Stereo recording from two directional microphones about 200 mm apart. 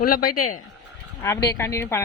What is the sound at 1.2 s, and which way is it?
Speech, 20° left (ahead or behind).